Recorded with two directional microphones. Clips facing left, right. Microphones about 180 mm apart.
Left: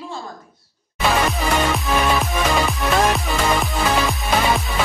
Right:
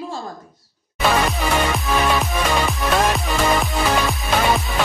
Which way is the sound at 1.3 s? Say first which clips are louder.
Even; centre (ahead or behind).